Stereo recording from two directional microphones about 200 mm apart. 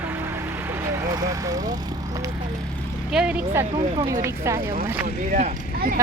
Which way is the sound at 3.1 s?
5° right (ahead or behind).